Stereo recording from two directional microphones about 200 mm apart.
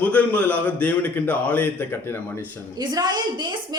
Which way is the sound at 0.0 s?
10° left (ahead or behind).